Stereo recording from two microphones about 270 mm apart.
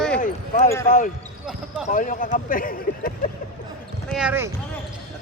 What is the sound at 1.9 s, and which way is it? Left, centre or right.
Speech, left.